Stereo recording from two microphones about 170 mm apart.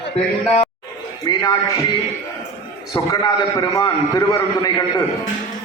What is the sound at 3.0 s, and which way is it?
A man's voice, 20° left (ahead or behind).